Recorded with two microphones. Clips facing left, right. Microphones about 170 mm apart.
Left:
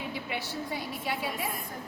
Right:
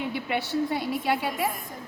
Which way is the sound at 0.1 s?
65° right (ahead or behind).